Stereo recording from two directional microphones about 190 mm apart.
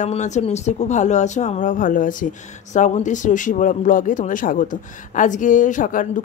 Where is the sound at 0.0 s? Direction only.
40° left (ahead or behind).